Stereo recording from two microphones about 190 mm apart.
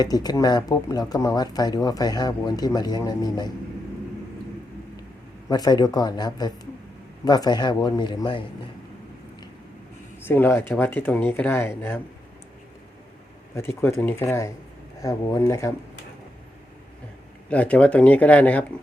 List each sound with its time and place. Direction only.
0.0 s speech: 20° left (ahead or behind)
5.5 s speech: 20° left (ahead or behind)
10.2 s speech: 10° left (ahead or behind)
13.6 s speech: 15° left (ahead or behind)
17.5 s speech: 5° left (ahead or behind)